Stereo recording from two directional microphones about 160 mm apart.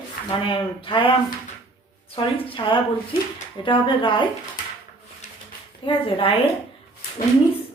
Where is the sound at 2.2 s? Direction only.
30° left (ahead or behind).